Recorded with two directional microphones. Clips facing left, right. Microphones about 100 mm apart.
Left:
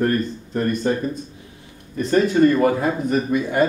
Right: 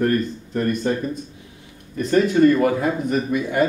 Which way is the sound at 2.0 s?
35° left (ahead or behind).